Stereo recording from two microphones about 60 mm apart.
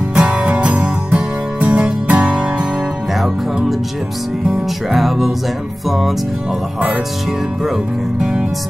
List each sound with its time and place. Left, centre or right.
0.1 s music: centre
3.2 s music: centre
7.6 s speech: centre